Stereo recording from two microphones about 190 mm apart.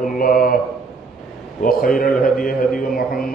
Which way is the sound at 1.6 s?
50° left (ahead or behind).